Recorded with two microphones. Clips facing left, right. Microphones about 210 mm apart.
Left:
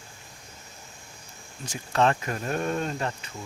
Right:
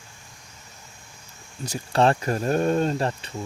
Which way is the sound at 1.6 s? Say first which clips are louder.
Right 3 dB; 35° right (ahead or behind).